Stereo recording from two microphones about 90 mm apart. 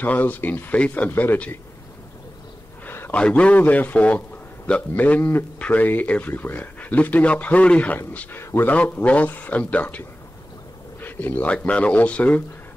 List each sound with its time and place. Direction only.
0.0 s speech: 20° left (ahead or behind)
2.8 s a sound: 20° left (ahead or behind)
3.2 s speech: 10° left (ahead or behind)